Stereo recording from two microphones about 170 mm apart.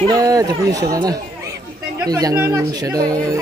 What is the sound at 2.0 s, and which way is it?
Speech, 20° right (ahead or behind).